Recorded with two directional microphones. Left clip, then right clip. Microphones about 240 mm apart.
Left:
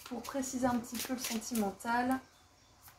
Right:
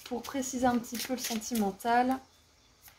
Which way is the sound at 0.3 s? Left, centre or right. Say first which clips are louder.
Right 4 dB; right.